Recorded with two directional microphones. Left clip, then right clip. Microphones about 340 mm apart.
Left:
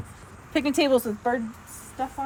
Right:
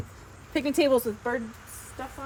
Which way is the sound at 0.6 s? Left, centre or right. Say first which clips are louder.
Left 1 dB; centre.